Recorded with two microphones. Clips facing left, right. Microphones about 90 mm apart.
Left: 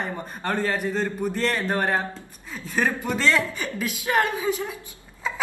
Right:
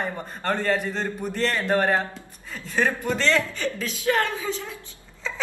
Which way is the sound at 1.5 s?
20° left (ahead or behind).